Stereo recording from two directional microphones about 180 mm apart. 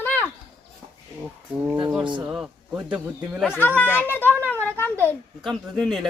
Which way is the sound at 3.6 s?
10° left (ahead or behind).